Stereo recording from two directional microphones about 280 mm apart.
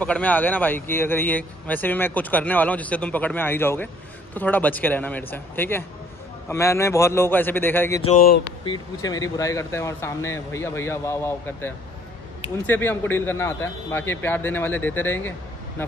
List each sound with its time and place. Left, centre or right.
0.0 s speech: centre
8.0 s speech: left
8.6 s speech: centre